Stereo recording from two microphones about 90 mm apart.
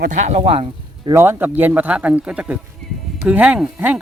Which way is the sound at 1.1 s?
25° right (ahead or behind).